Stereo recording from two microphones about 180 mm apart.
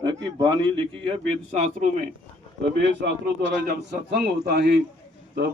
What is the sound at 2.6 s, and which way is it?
A man's voice, 70° right (ahead or behind).